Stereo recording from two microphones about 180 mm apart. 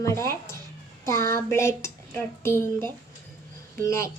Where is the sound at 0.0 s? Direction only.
15° left (ahead or behind).